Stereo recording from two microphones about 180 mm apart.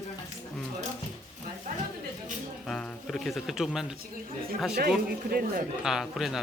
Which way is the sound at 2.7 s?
Centre (ahead or behind).